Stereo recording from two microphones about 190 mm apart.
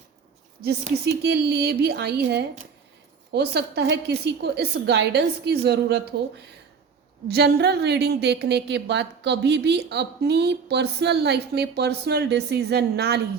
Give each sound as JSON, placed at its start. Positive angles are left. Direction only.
{"t": 0.6, "sound": "a woman's voice", "side_deg": -55}